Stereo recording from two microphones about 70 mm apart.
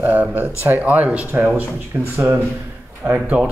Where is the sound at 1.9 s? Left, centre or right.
Right.